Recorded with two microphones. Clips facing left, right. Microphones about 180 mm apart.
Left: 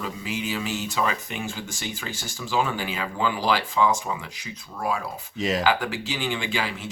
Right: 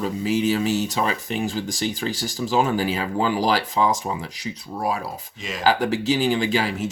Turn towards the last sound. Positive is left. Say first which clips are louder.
# right 7 dB
turn(degrees=-40)  # may be behind; listen again after turning